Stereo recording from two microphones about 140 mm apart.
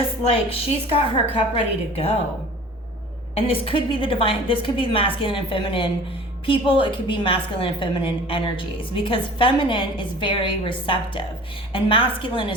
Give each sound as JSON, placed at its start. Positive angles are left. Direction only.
{"t": 0.5, "sound": "a woman's voice", "side_deg": 45}
{"t": 3.3, "sound": "a woman's voice", "side_deg": 40}